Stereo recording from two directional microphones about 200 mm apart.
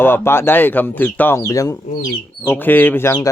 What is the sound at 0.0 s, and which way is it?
Speech, 10° left (ahead or behind).